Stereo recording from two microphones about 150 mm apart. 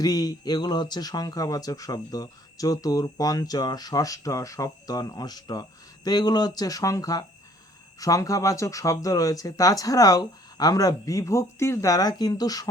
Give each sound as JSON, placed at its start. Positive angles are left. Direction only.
{"t": 0.0, "sound": "speech", "side_deg": 25}